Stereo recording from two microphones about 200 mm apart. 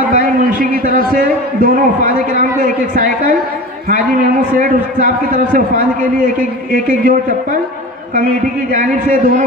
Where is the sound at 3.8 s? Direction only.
45° right (ahead or behind).